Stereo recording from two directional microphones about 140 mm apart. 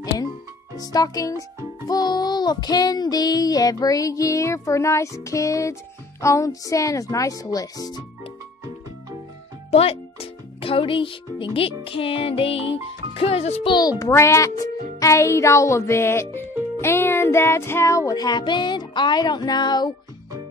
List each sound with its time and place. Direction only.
0.7 s child singing: 25° left (ahead or behind)
9.7 s speech: 45° left (ahead or behind)
10.6 s music: 40° left (ahead or behind)
13.1 s a child's voice: 45° left (ahead or behind)
13.7 s child singing: 30° left (ahead or behind)